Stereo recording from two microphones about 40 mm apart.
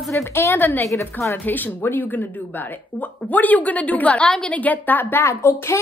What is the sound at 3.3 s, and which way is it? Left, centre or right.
A woman's voice, left.